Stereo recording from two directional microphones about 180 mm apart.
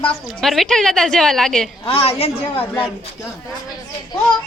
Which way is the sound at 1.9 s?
35° left (ahead or behind).